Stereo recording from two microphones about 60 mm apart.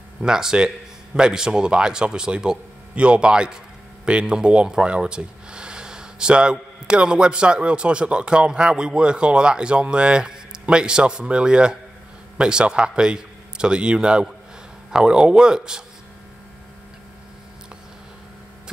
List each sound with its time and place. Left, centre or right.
0.2 s a man's voice: centre